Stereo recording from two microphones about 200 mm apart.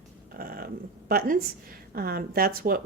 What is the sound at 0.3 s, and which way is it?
A woman's voice, 45° right (ahead or behind).